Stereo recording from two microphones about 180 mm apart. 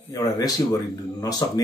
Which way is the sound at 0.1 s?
20° left (ahead or behind).